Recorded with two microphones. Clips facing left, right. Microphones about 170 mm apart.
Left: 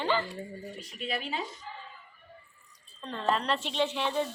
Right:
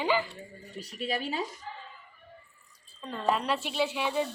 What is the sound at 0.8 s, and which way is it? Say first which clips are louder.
Speech: right 4 dB; 40° right (ahead or behind).